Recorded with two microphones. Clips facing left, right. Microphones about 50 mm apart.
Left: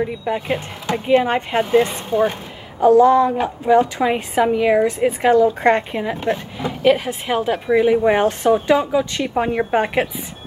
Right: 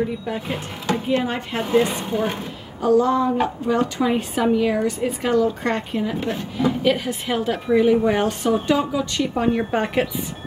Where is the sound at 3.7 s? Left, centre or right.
Centre.